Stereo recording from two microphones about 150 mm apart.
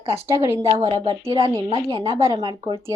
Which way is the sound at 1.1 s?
35° right (ahead or behind).